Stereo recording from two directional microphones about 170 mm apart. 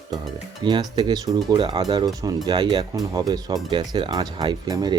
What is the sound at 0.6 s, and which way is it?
Speech, 25° right (ahead or behind).